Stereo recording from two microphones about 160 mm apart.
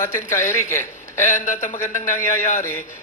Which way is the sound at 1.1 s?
50° left (ahead or behind).